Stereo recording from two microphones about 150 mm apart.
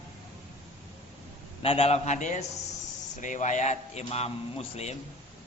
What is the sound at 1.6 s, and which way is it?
A man's voice, 40° left (ahead or behind).